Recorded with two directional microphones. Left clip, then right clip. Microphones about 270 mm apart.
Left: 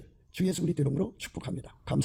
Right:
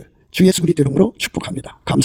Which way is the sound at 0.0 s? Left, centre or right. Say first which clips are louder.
Right 17 dB; right.